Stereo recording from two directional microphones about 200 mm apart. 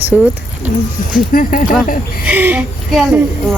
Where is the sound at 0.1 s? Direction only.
5° right (ahead or behind).